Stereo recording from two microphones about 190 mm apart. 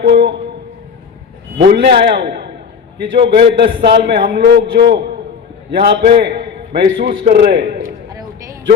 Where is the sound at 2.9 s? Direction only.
60° right (ahead or behind).